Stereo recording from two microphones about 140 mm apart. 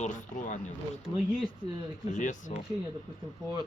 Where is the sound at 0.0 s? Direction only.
60° left (ahead or behind).